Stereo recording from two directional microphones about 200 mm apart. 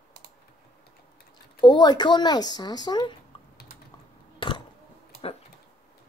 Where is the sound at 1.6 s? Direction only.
20° left (ahead or behind).